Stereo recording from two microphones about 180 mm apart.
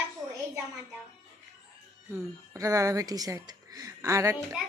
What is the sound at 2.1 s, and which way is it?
A woman's voice, 20° right (ahead or behind).